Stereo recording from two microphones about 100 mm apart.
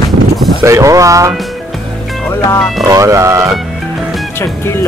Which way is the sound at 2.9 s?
30° right (ahead or behind).